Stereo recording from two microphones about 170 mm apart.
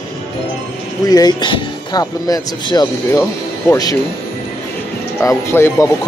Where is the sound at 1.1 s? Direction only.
25° left (ahead or behind).